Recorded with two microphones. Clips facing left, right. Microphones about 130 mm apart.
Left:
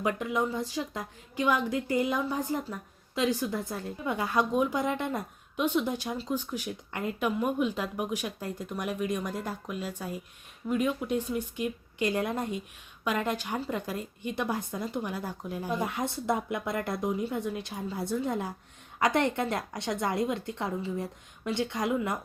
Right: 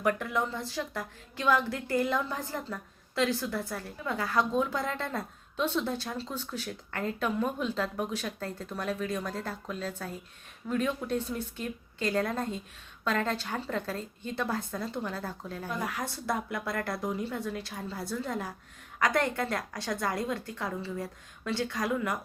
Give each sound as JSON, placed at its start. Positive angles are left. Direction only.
{"t": 0.0, "sound": "a woman's voice", "side_deg": 15}